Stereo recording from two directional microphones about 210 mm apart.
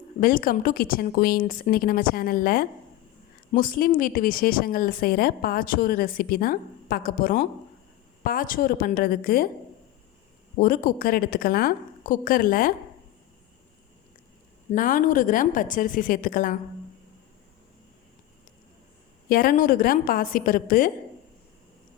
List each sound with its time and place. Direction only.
0.2 s speech: 40° left (ahead or behind)
10.6 s speech: 40° left (ahead or behind)
14.7 s a woman's voice: 40° left (ahead or behind)
19.3 s a woman's voice: 45° left (ahead or behind)